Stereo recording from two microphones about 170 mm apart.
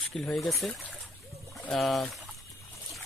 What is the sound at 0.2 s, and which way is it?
Speech, 5° left (ahead or behind).